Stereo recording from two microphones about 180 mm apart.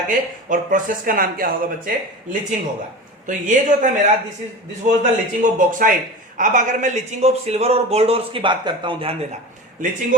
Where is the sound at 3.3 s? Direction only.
45° right (ahead or behind).